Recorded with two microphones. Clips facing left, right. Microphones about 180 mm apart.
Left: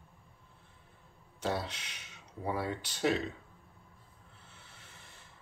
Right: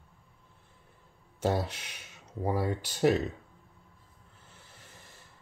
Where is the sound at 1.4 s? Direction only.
45° right (ahead or behind).